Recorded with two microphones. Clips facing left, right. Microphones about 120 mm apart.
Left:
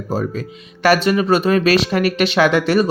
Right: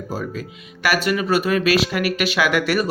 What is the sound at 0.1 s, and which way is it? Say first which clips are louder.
Speech: left 7 dB; 30° left (ahead or behind).